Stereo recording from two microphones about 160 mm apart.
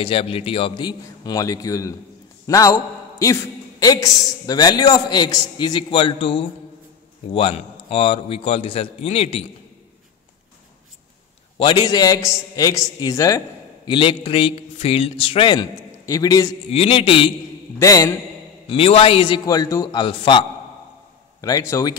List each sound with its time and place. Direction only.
0.0 s a man's voice: 35° left (ahead or behind)
11.5 s a man's voice: 30° left (ahead or behind)
16.7 s a man's voice: 35° left (ahead or behind)
17.7 s a man's voice: 20° left (ahead or behind)
18.7 s a man's voice: 35° left (ahead or behind); by 21.9 s 20° left (ahead or behind)